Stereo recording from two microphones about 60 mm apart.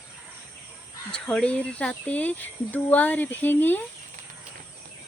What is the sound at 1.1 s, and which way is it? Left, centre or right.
Speech, centre.